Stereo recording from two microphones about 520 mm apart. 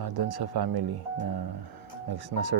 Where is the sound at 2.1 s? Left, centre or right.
Right.